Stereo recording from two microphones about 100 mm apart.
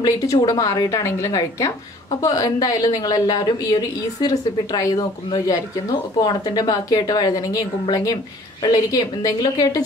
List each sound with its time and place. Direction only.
0.0 s a woman's voice: 40° left (ahead or behind)